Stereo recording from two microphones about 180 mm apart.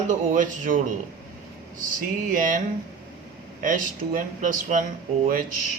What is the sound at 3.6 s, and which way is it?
Speech, 50° right (ahead or behind).